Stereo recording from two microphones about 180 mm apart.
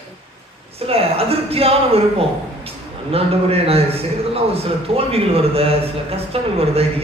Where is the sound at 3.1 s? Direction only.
35° right (ahead or behind).